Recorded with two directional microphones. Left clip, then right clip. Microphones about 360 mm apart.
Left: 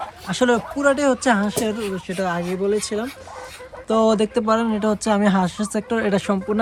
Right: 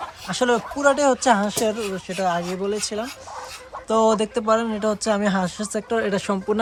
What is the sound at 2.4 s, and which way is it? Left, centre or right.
Speech, centre.